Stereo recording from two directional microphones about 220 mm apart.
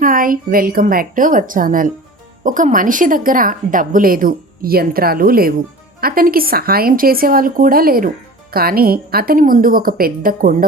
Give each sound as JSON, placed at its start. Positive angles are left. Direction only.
{"t": 0.0, "sound": "speech", "side_deg": -40}